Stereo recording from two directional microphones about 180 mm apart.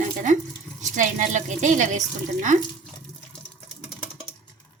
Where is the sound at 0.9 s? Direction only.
45° right (ahead or behind).